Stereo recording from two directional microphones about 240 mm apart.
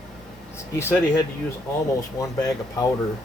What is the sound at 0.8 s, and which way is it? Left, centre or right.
Speech, centre.